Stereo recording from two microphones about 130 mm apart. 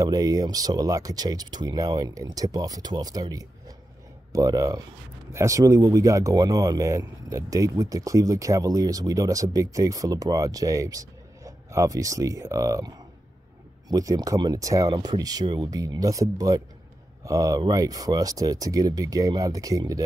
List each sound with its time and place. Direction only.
0.0 s speech: 30° right (ahead or behind)